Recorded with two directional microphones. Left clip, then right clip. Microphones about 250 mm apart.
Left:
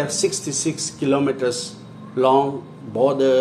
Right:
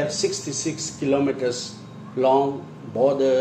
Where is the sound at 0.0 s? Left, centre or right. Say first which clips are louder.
Left 2 dB; left.